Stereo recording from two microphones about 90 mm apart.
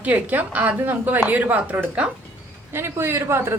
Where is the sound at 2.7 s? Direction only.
25° right (ahead or behind).